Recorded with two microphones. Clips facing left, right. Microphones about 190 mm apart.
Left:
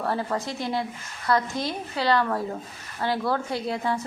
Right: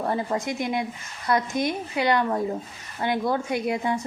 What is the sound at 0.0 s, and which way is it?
A woman's voice, 20° right (ahead or behind).